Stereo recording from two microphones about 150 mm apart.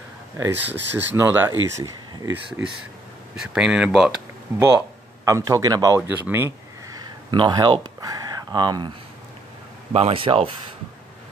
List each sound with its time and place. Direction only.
0.4 s speech: 15° right (ahead or behind)
3.3 s speech: 5° right (ahead or behind)
4.6 s speech: 20° right (ahead or behind)
7.0 s a sound: 30° right (ahead or behind)
9.9 s speech: 40° right (ahead or behind)